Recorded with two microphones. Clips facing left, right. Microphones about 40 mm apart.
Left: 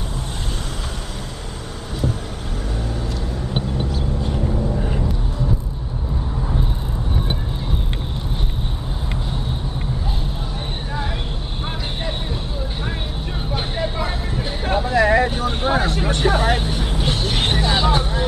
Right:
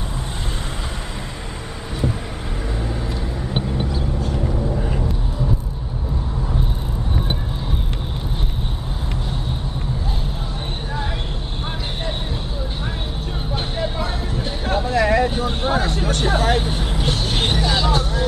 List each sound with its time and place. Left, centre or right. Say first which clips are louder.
3.5 s vehicle: right 1 dB; centre
4.7 s vehicle: even; centre
13.8 s a sound: even; centre
15.6 s vehicle: left 2 dB; centre
16.6 s vehicle: even; centre; by 18.2 s left